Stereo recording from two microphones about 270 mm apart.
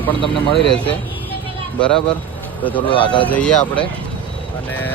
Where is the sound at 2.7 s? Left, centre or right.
Centre.